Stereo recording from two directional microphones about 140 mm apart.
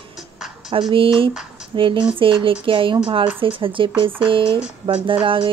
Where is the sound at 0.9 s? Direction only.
40° right (ahead or behind).